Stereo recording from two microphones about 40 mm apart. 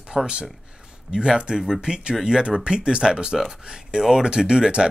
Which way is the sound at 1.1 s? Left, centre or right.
Centre.